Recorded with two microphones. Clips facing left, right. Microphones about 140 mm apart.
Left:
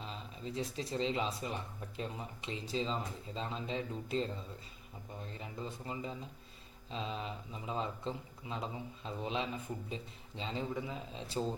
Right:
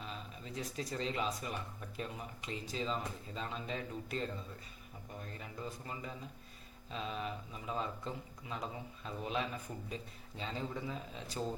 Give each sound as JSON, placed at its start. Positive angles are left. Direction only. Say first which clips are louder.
{"t": 0.0, "sound": "speech", "louder": "left 2 dB", "side_deg": 30}